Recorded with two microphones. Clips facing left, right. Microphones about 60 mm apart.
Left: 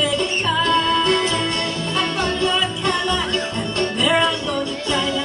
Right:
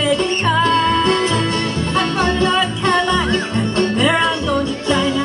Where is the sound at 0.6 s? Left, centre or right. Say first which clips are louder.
Right 2 dB; right.